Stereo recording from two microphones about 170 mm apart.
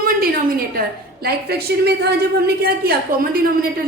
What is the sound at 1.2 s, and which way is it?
Speech, 70° right (ahead or behind).